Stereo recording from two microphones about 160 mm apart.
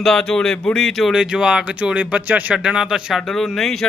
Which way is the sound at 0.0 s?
5° left (ahead or behind).